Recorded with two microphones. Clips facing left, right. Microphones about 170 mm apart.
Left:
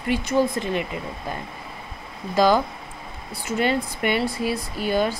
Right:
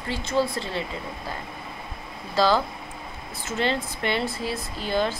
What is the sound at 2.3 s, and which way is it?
Speech, 15° left (ahead or behind).